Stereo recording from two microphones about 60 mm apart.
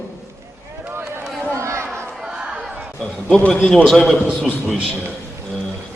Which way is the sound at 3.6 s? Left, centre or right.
Centre.